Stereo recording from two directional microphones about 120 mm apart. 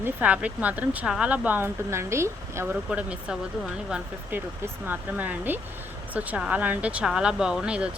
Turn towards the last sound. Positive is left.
turn(degrees=-10)  # may be behind; listen again after turning